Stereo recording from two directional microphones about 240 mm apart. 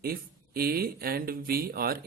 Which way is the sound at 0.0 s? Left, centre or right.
Right.